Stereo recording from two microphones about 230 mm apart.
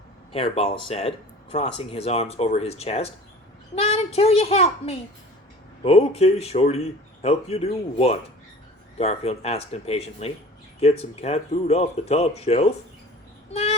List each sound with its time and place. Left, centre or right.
0.3 s speech: left
13.5 s child singing: left